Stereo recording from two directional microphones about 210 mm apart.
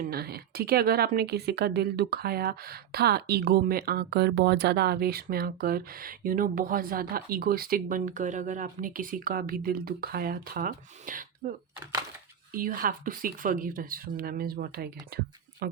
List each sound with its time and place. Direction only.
0.0 s speech: 45° right (ahead or behind)
12.5 s speech: 40° right (ahead or behind)